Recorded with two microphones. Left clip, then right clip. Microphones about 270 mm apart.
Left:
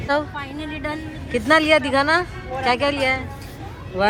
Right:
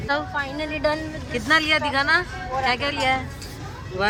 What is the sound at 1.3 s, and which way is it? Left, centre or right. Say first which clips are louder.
Speech: left 4 dB; centre.